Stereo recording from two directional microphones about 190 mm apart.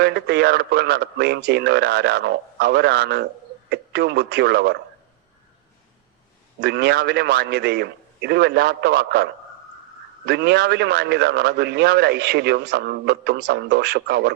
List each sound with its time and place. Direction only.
0.0 s a man's voice: 60° right (ahead or behind)
6.6 s a man's voice: 60° right (ahead or behind)